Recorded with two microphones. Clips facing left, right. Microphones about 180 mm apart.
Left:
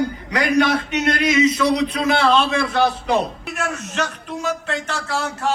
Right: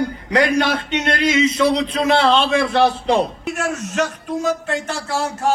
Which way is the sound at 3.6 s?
40° right (ahead or behind).